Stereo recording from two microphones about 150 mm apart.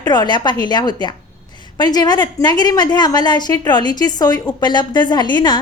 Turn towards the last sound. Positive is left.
turn(degrees=30)  # may be behind; listen again after turning